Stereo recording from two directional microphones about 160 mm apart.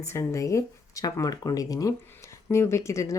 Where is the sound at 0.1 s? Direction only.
20° left (ahead or behind).